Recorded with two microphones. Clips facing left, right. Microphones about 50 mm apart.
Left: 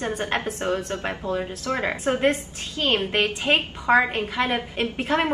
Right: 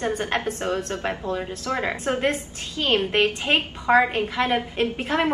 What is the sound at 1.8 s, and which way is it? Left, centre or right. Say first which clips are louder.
A woman's voice: left 3 dB; centre.